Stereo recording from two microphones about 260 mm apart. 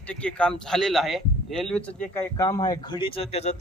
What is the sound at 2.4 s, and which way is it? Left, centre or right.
Speech, centre.